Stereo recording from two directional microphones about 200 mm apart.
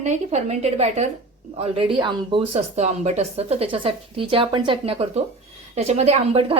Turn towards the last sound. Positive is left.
turn(degrees=-30)  # may be behind; listen again after turning